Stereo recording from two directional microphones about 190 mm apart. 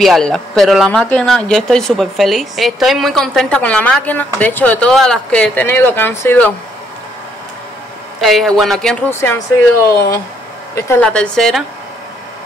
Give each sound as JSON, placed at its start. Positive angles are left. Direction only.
{"t": 0.0, "sound": "speech", "side_deg": 0}
{"t": 8.2, "sound": "speech", "side_deg": 0}